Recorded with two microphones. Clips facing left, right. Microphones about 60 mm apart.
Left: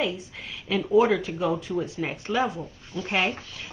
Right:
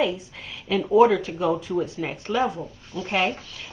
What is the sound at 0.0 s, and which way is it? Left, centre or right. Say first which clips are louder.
Speech: right 4 dB; centre.